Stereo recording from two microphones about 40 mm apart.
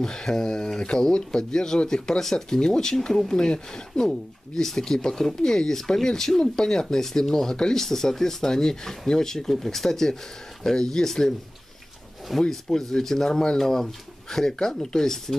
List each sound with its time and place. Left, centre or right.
0.0 s speech: centre
4.1 s speech: centre